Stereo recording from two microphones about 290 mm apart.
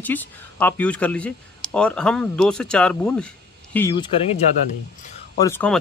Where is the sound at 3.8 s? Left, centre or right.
Centre.